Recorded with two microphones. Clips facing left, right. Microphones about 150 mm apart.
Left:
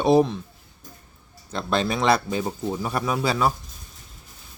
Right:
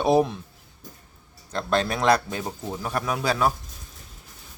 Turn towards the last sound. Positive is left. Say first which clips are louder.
# left 1 dB
turn(degrees=0)  # may be behind; listen again after turning